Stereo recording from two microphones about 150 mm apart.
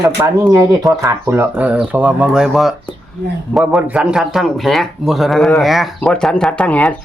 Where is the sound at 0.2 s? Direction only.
20° right (ahead or behind).